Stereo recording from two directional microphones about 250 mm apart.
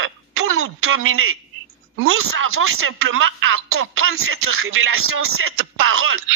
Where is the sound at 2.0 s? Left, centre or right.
Right.